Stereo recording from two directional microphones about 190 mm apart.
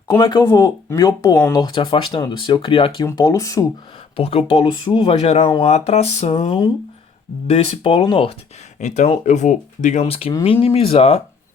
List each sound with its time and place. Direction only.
0.1 s speech: 15° left (ahead or behind)
4.2 s speech: 30° left (ahead or behind)
8.8 s speech: 40° left (ahead or behind)